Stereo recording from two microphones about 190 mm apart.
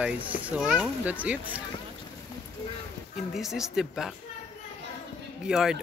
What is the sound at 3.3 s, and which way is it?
Speech, centre (ahead or behind).